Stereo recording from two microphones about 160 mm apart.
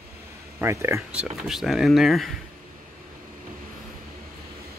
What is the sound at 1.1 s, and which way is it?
Speech, 5° right (ahead or behind).